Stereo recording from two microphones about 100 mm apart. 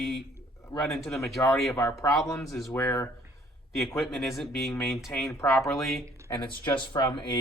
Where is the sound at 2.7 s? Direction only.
15° left (ahead or behind).